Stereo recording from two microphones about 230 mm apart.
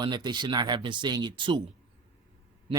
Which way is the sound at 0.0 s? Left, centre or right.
Centre.